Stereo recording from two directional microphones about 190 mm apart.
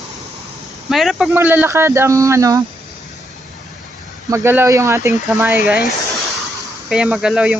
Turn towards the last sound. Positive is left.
turn(degrees=-5)  # may be behind; listen again after turning